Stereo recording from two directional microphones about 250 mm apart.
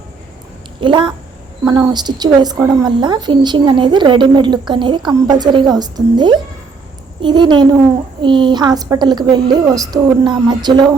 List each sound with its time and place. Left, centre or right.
0.8 s speech: centre